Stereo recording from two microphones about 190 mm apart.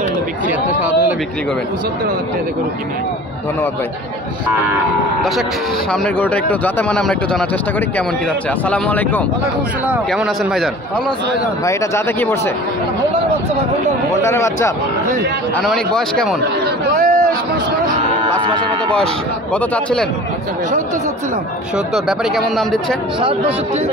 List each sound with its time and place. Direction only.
5.9 s speech: 5° left (ahead or behind)
8.6 s speech: 5° left (ahead or behind)
9.8 s a man's voice: 5° right (ahead or behind)
11.6 s speech: 15° left (ahead or behind)
14.2 s speech: 15° left (ahead or behind)
15.5 s a man's voice: centre (ahead or behind)
16.9 s a sound: 40° right (ahead or behind)
18.2 s a sound: 25° right (ahead or behind)
19.5 s speech: 5° left (ahead or behind)
21.7 s a man's voice: centre (ahead or behind)